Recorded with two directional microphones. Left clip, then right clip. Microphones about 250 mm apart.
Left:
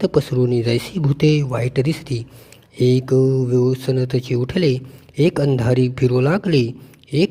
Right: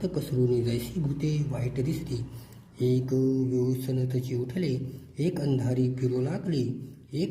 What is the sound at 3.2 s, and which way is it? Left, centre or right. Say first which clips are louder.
Mantra: left 10 dB; left.